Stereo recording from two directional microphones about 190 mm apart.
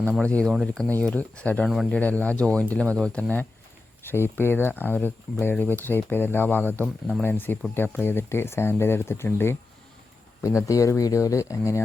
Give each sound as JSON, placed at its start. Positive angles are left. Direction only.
{"t": 0.0, "sound": "speech", "side_deg": 5}